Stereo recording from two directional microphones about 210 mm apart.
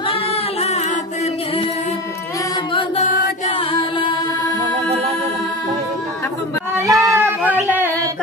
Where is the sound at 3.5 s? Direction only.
25° left (ahead or behind).